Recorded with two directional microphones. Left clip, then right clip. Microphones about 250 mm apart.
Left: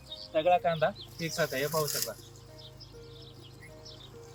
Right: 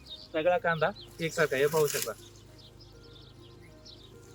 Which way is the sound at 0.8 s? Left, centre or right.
Right.